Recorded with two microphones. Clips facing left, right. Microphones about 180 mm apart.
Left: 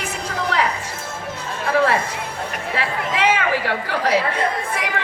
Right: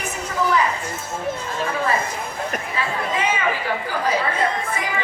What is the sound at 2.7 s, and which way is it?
Chatter, 75° left (ahead or behind).